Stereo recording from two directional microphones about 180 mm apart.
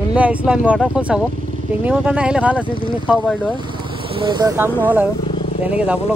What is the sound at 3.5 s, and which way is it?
Speech, 25° right (ahead or behind).